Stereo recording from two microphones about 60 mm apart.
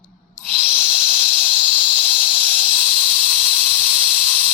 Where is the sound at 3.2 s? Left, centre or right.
Centre.